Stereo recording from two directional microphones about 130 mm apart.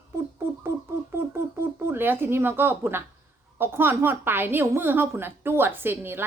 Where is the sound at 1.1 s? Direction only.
20° right (ahead or behind).